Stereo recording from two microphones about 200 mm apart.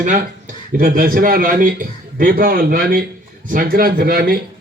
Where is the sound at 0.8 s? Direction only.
45° right (ahead or behind).